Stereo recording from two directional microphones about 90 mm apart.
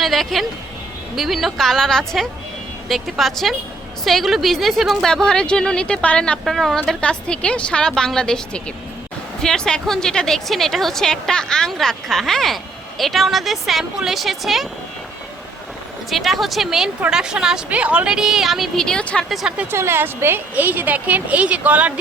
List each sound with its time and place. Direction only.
0.0 s a woman's voice: centre (ahead or behind)
16.0 s a woman's voice: centre (ahead or behind)
19.3 s a woman's voice: centre (ahead or behind)
19.7 s speech: 30° right (ahead or behind)